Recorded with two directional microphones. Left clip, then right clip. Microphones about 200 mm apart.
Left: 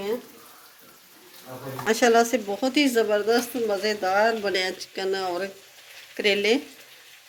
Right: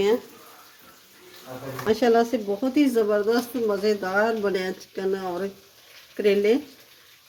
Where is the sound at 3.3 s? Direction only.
50° right (ahead or behind).